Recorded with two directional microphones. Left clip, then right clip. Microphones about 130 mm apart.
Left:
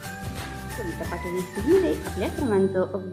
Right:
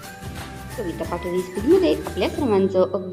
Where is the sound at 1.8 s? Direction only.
20° right (ahead or behind).